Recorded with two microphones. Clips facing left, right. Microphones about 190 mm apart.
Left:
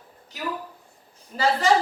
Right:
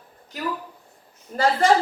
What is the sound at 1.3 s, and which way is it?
Speech, 50° right (ahead or behind).